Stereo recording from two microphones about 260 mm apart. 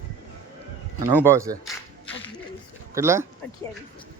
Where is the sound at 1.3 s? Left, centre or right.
Centre.